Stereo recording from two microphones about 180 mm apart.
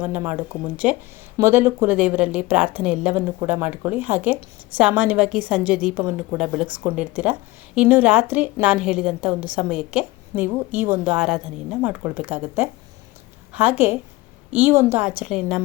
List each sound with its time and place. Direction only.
0.0 s a woman's voice: 10° right (ahead or behind)